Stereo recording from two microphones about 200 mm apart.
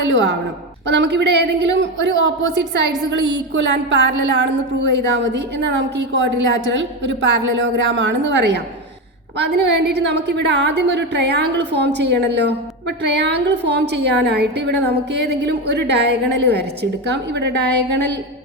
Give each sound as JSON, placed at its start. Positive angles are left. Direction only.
{"t": 0.0, "sound": "a woman's voice", "side_deg": -65}